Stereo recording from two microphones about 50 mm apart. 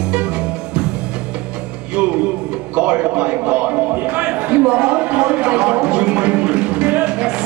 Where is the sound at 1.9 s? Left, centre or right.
Right.